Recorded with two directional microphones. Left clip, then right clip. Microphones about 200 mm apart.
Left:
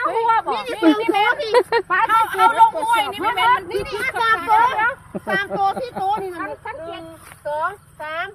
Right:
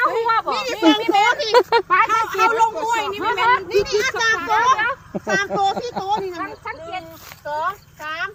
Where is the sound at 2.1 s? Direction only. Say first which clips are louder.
Left 2 dB; 25° left (ahead or behind).